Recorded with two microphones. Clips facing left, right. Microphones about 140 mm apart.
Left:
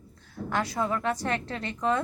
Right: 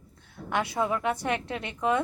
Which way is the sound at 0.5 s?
10° right (ahead or behind).